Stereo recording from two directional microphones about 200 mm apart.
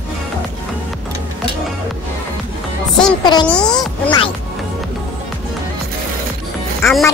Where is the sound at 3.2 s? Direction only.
20° left (ahead or behind).